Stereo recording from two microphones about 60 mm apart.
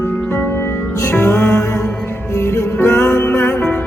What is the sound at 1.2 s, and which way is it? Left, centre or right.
Music, left.